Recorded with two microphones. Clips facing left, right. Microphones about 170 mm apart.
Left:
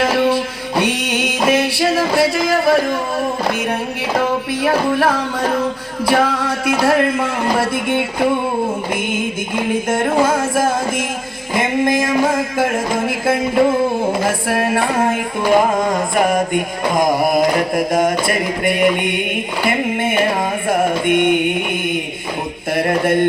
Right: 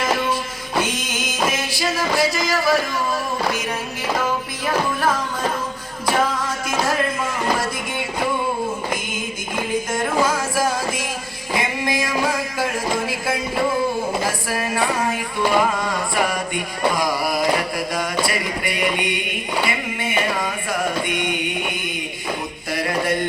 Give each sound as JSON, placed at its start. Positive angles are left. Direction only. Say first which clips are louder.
{"t": 0.0, "sound": "music", "louder": "left 7 dB", "side_deg": 65}
{"t": 4.2, "sound": "music", "louder": "left 6 dB", "side_deg": 65}
{"t": 9.6, "sound": "music", "louder": "left 5 dB", "side_deg": 55}
{"t": 11.5, "sound": "a sound", "louder": "left 7 dB", "side_deg": 50}
{"t": 14.3, "sound": "music", "louder": "left 7 dB", "side_deg": 60}
{"t": 18.3, "sound": "a sound", "louder": "left 7 dB", "side_deg": 50}
{"t": 22.7, "sound": "mantra", "louder": "left 6 dB", "side_deg": 55}